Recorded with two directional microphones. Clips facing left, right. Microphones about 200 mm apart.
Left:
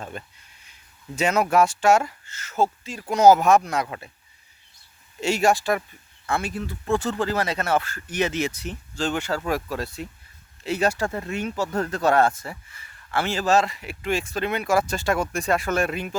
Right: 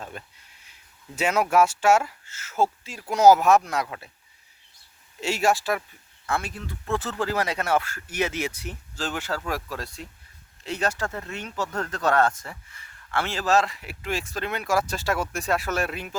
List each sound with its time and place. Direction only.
0.0 s speech: centre (ahead or behind)
5.2 s speech: centre (ahead or behind)